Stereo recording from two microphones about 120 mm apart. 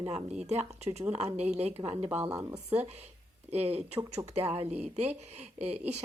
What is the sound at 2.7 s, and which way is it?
A woman's voice, 60° right (ahead or behind).